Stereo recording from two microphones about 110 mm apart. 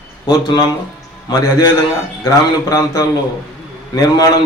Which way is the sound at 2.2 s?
30° left (ahead or behind).